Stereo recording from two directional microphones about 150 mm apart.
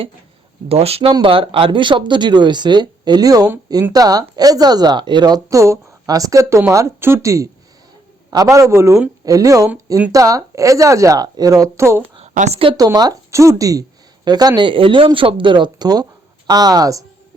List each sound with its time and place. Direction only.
0.7 s speech: 40° right (ahead or behind); by 12.0 s 20° right (ahead or behind)
12.3 s speech: 55° right (ahead or behind)
12.7 s speech: 25° right (ahead or behind)